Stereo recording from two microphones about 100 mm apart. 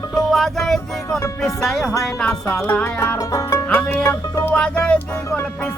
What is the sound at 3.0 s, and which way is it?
Music, 30° left (ahead or behind).